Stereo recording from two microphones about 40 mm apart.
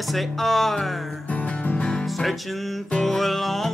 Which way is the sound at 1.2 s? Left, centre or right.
Left.